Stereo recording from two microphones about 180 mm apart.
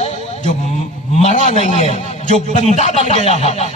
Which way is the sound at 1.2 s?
40° left (ahead or behind).